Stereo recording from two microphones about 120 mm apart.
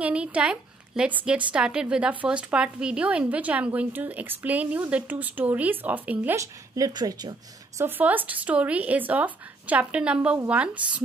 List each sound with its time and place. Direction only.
0.0 s a woman's voice: 10° right (ahead or behind)
6.3 s a woman's voice: 25° right (ahead or behind)
7.8 s a woman's voice: 15° right (ahead or behind)